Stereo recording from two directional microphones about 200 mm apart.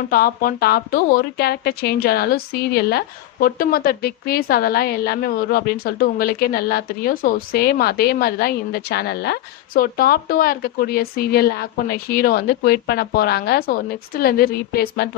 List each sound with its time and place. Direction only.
0.1 s speech: 45° left (ahead or behind)